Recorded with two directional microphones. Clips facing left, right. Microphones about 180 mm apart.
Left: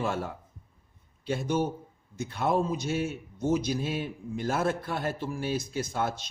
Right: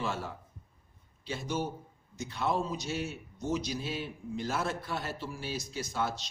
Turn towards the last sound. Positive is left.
turn(degrees=55)  # may be behind; listen again after turning